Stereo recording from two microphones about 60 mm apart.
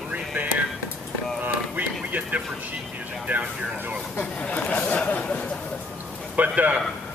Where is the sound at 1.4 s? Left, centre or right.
Right.